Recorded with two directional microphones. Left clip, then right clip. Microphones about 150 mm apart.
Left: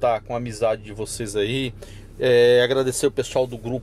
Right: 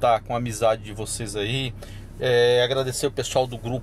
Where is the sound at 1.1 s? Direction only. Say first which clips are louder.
Left 4 dB; 20° left (ahead or behind).